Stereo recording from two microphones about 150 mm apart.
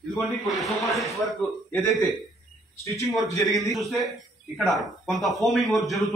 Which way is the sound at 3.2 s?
25° left (ahead or behind).